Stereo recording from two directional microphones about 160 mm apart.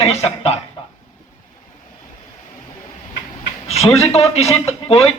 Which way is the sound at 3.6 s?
40° left (ahead or behind).